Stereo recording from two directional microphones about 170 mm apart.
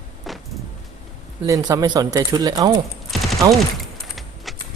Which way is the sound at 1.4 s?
20° right (ahead or behind).